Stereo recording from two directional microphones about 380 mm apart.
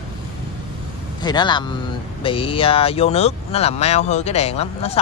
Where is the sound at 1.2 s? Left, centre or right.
Centre.